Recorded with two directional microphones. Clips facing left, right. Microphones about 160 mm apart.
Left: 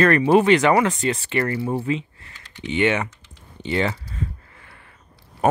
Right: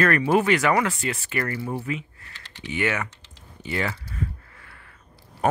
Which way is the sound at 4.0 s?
25° left (ahead or behind).